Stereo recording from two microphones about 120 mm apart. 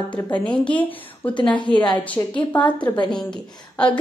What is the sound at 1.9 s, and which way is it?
Speech, 10° left (ahead or behind).